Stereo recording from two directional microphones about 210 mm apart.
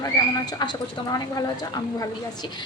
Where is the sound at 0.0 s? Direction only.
20° left (ahead or behind).